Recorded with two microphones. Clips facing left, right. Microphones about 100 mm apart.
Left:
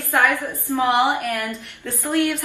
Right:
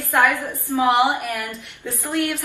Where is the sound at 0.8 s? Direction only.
5° right (ahead or behind).